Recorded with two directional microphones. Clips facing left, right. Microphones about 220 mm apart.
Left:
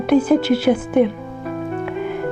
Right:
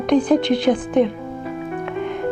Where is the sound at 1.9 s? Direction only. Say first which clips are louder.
Left 1 dB; 5° left (ahead or behind).